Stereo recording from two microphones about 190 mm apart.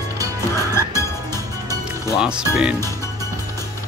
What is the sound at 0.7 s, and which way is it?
Music, 15° left (ahead or behind).